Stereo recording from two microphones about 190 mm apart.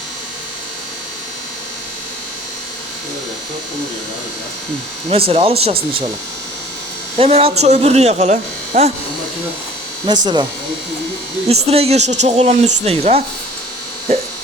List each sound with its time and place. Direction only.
5.0 s speech: 30° right (ahead or behind)
7.2 s speech: 30° right (ahead or behind)
10.1 s speech: 25° right (ahead or behind)
11.4 s speech: 35° right (ahead or behind)